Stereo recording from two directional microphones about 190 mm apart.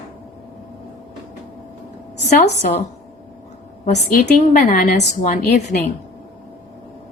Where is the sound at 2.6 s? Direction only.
45° left (ahead or behind).